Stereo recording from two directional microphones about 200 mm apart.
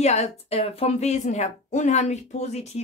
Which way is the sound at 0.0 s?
35° left (ahead or behind).